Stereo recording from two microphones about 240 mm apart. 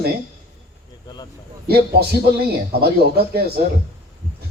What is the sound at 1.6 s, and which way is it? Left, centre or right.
Speech, right.